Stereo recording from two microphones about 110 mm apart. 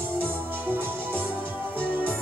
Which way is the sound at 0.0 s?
20° right (ahead or behind).